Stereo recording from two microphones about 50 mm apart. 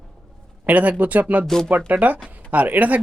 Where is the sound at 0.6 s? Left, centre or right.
Right.